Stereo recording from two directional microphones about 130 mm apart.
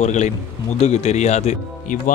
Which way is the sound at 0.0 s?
65° left (ahead or behind).